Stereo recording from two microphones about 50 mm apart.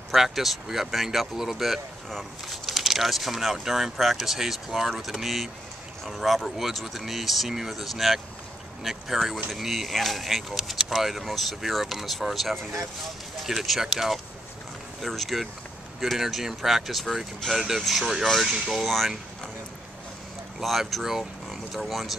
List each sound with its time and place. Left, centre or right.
0.1 s speech: centre
20.6 s speech: centre
21.5 s vehicle: centre